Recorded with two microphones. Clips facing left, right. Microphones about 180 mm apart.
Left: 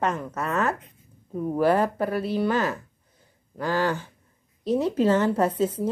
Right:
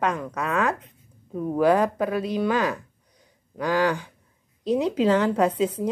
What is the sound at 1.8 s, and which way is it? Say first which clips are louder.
Speech: right 1 dB; 15° right (ahead or behind).